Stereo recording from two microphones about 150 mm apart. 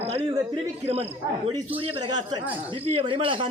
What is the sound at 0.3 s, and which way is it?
A man's voice, 25° right (ahead or behind).